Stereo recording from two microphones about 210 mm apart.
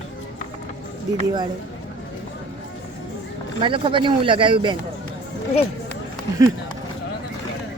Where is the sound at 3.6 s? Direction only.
25° right (ahead or behind).